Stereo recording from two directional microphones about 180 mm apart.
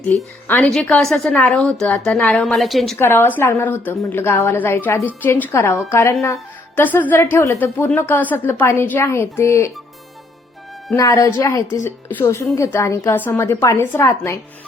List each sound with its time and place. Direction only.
0.1 s a woman's voice: 10° left (ahead or behind)
3.0 s a woman's voice: 10° left (ahead or behind)
10.9 s a woman's voice: 20° left (ahead or behind)